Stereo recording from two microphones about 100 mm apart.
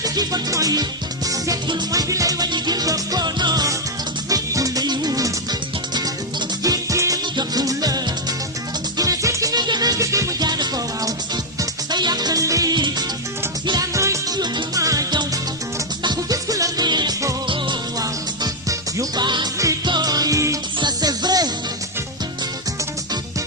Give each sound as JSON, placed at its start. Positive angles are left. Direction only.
{"t": 0.0, "sound": "music", "side_deg": -40}
{"t": 1.9, "sound": "music", "side_deg": -35}
{"t": 12.7, "sound": "music", "side_deg": -50}
{"t": 13.9, "sound": "music", "side_deg": -30}
{"t": 14.3, "sound": "music", "side_deg": -45}
{"t": 16.0, "sound": "music", "side_deg": -35}
{"t": 18.0, "sound": "music", "side_deg": -35}
{"t": 19.2, "sound": "music", "side_deg": -50}
{"t": 20.7, "sound": "music", "side_deg": -45}